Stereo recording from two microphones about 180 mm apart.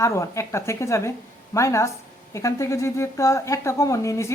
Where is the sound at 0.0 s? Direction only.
15° left (ahead or behind).